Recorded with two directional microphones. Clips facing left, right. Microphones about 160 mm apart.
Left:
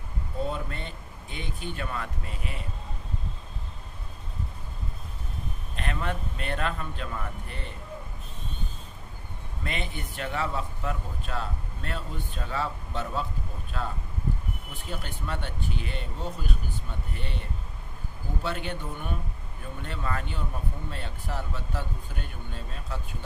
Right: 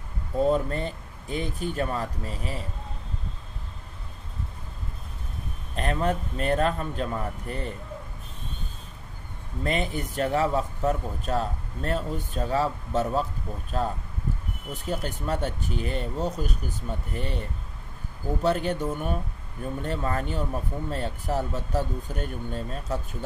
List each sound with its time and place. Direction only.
0.5 s speech: 40° right (ahead or behind)
5.8 s speech: 40° right (ahead or behind)
9.6 s speech: 40° right (ahead or behind)
18.4 s speech: 40° right (ahead or behind)